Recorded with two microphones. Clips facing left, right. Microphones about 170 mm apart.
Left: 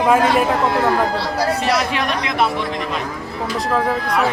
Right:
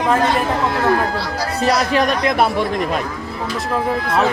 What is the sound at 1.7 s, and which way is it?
A man's voice, 40° right (ahead or behind).